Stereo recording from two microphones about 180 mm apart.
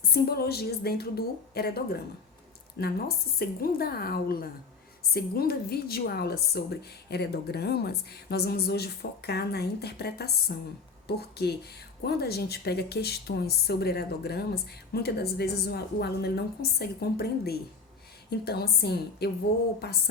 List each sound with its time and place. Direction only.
0.1 s a woman's voice: 60° left (ahead or behind)